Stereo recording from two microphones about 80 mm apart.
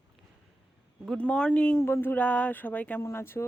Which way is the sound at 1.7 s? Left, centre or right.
Left.